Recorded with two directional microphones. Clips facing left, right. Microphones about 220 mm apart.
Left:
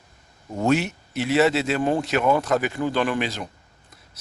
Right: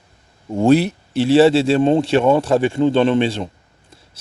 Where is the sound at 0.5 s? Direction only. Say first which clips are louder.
Right 8 dB; 30° right (ahead or behind).